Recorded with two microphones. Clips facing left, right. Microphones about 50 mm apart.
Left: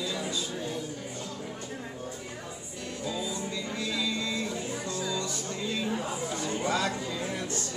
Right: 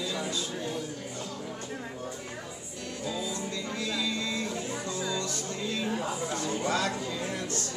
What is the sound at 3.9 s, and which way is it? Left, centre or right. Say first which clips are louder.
Vehicle: left 1 dB; centre.